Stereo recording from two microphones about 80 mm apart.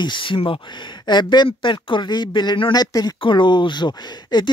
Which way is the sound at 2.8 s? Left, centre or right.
Left.